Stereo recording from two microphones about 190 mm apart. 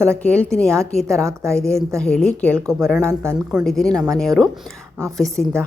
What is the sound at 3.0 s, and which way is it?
Speech, 15° right (ahead or behind).